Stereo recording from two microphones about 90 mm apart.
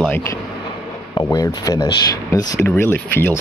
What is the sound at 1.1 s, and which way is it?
Speech, 45° left (ahead or behind).